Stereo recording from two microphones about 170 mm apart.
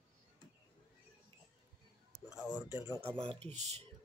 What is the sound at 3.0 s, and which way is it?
Speech, 35° right (ahead or behind).